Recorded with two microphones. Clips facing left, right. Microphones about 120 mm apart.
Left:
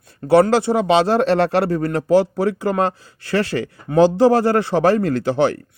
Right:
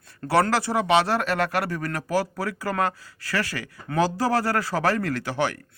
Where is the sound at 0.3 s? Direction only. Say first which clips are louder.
Left 8 dB; 20° left (ahead or behind).